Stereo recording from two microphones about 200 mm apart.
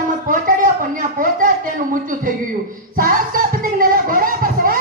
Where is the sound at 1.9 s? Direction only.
40° right (ahead or behind).